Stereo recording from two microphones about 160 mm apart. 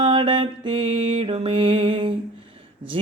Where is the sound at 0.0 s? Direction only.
35° right (ahead or behind).